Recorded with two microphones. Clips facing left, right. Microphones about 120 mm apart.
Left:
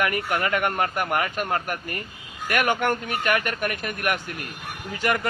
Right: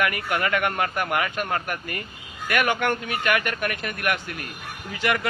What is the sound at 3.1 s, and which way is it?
Speech, 40° left (ahead or behind).